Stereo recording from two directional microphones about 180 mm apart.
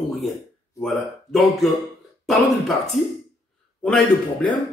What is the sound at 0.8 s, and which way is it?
Speech, centre (ahead or behind).